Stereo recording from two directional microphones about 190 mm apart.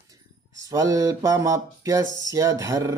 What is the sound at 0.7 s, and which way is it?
Mantra, 20° right (ahead or behind).